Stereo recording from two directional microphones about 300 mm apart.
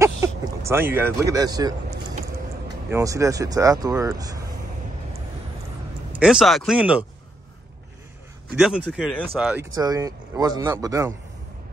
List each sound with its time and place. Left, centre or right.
0.0 s speech: centre
2.9 s speech: centre
6.1 s speech: centre
8.5 s speech: centre